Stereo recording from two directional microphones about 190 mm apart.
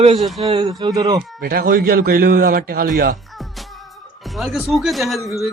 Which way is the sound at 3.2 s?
Centre (ahead or behind).